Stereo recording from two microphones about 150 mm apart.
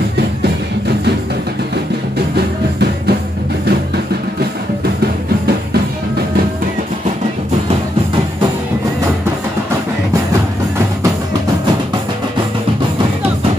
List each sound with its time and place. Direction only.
2.3 s music: 90° right